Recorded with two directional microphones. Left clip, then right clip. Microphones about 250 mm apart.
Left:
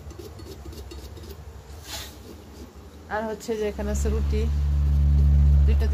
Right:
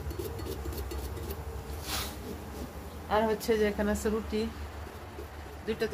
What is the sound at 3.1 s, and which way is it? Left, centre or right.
A woman's voice, centre.